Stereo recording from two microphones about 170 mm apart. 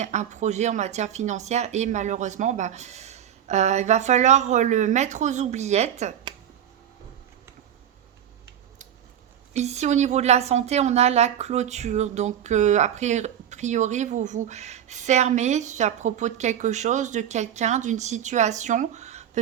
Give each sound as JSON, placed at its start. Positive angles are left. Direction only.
{"t": 0.0, "sound": "a woman's voice", "side_deg": -45}
{"t": 9.5, "sound": "a woman's voice", "side_deg": -40}